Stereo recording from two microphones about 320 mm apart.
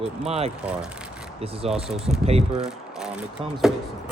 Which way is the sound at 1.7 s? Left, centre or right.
Centre.